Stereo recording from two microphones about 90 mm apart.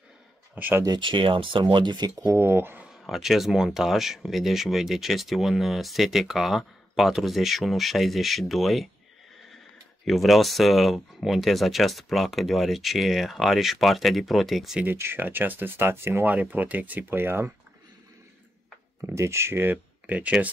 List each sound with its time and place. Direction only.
0.6 s speech: 20° right (ahead or behind)
0.8 s speech: 60° right (ahead or behind); by 2.4 s 40° right (ahead or behind)
2.4 s speech: 25° right (ahead or behind)
2.9 s speech: 5° right (ahead or behind)
10.0 s speech: centre (ahead or behind)
15.0 s speech: 25° right (ahead or behind)
16.3 s speech: 20° right (ahead or behind)
18.9 s speech: 30° right (ahead or behind); by 20.5 s 15° right (ahead or behind)